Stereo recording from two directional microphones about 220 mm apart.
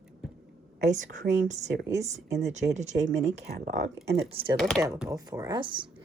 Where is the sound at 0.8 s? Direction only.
35° right (ahead or behind).